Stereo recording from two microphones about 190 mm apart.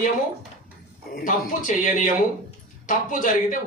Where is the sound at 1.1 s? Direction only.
50° left (ahead or behind).